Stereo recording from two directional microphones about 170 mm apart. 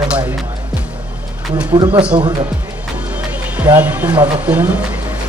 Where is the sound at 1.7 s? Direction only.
25° right (ahead or behind).